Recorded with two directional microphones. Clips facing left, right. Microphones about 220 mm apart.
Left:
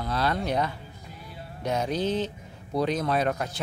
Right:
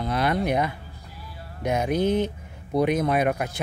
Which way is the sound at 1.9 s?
55° right (ahead or behind).